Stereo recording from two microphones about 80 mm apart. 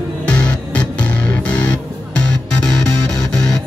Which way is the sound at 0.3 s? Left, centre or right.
Centre.